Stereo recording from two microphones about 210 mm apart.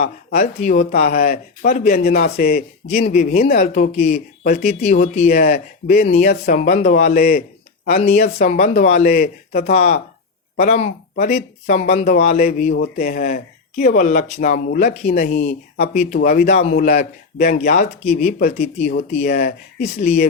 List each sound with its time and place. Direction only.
0.0 s speech: 35° left (ahead or behind)
7.9 s speech: 30° left (ahead or behind)